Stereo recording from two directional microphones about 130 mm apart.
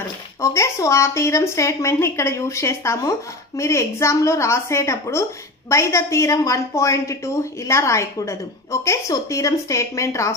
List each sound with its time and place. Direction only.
0.4 s speech: 25° left (ahead or behind)